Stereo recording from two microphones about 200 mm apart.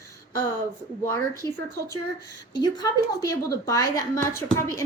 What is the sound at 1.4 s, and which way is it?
Speech, 20° right (ahead or behind).